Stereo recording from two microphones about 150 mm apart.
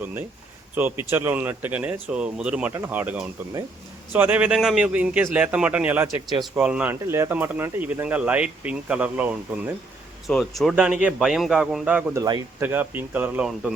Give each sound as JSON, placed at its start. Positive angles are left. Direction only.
{"t": 0.0, "sound": "speech", "side_deg": -10}
{"t": 10.2, "sound": "speech", "side_deg": 0}
{"t": 12.2, "sound": "speech", "side_deg": -25}
{"t": 12.6, "sound": "speech", "side_deg": -15}